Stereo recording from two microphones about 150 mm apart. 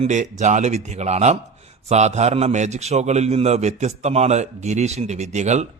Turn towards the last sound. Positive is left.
turn(degrees=-50)  # may be behind; listen again after turning